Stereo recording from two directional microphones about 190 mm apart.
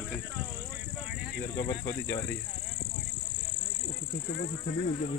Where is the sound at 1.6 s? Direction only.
20° left (ahead or behind).